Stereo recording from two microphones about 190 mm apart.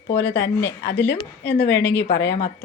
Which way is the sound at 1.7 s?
10° left (ahead or behind).